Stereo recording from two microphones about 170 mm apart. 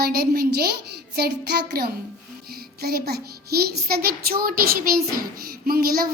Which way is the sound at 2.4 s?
65° right (ahead or behind).